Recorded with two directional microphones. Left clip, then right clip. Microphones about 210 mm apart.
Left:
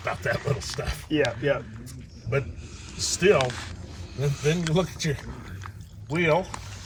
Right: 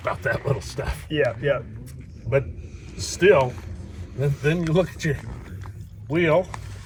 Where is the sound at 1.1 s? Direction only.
30° left (ahead or behind).